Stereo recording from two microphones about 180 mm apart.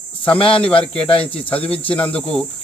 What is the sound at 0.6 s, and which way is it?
Speech, 5° left (ahead or behind).